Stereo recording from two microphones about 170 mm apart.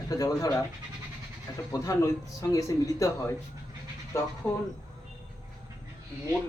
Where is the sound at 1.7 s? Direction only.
20° left (ahead or behind).